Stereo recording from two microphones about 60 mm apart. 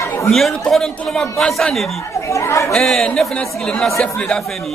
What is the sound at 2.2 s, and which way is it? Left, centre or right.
Speech, left.